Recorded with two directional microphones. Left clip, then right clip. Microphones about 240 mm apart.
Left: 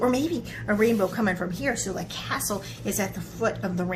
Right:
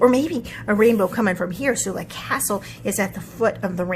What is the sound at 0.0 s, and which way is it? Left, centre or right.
A woman's voice, right.